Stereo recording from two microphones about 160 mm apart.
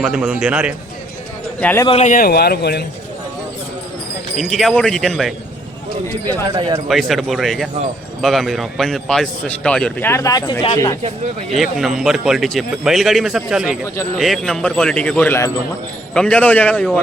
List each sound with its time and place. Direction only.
0.0 s a man's voice: centre (ahead or behind)
1.6 s speech: 15° left (ahead or behind)
1.9 s speech: 45° left (ahead or behind)
2.1 s speech: 75° left (ahead or behind); by 2.8 s 90° left
4.4 s a man's voice: centre (ahead or behind)
6.5 s speech: 30° right (ahead or behind)
6.8 s a man's voice: centre (ahead or behind)
10.1 s speech: 20° left (ahead or behind)
11.5 s a man's voice: centre (ahead or behind)